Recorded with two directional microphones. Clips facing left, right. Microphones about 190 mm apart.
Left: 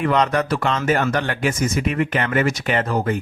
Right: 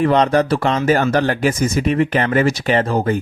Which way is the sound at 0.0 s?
35° right (ahead or behind).